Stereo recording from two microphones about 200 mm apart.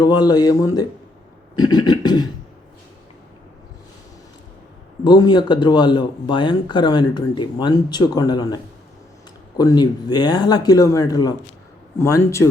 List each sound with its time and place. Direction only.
0.0 s speech: 20° left (ahead or behind)
5.0 s a man's voice: 20° left (ahead or behind)